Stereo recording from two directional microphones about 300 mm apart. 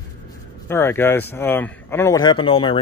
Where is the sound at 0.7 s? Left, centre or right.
Centre.